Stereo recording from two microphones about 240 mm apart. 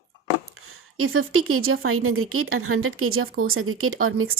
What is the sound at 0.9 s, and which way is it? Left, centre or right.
Speech, right.